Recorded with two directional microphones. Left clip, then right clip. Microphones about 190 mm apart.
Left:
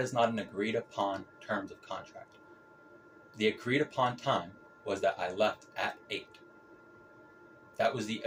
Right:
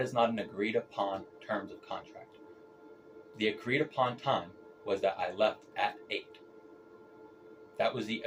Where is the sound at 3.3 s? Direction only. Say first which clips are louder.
Left 1 dB; 40° left (ahead or behind).